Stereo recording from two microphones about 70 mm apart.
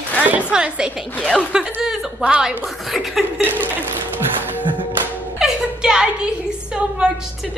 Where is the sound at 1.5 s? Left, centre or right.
Centre.